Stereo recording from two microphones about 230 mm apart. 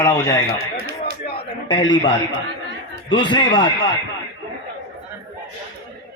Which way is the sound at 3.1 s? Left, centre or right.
Left.